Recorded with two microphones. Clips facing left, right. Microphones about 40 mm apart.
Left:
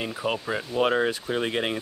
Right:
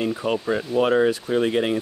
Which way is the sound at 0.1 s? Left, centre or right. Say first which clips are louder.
Right 5 dB; centre.